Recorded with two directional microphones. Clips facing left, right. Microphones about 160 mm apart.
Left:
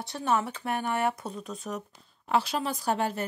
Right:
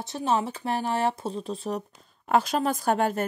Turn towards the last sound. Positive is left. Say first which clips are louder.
# right 4 dB
turn(degrees=-50)  # may be behind; listen again after turning